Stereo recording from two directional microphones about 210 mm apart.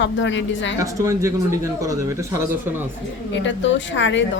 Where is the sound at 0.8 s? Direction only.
15° right (ahead or behind).